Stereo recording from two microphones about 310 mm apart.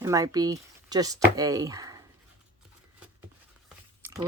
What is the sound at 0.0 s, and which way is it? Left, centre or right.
Speech, centre.